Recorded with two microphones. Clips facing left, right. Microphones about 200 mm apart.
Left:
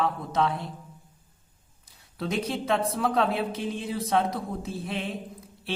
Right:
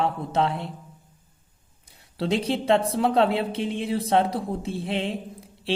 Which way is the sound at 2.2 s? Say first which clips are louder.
Right 5 dB; 30° right (ahead or behind).